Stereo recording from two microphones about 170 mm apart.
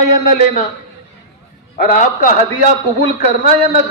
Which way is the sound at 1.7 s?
50° left (ahead or behind).